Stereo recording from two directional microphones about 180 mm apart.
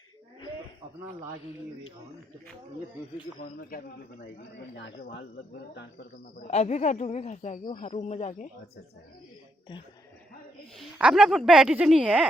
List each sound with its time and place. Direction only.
3.4 s a man's voice: 50° left (ahead or behind)
6.5 s a woman's voice: 40° left (ahead or behind)
10.9 s speech: 5° right (ahead or behind)